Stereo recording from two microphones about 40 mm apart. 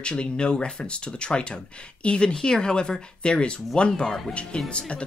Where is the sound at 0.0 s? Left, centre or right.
Left.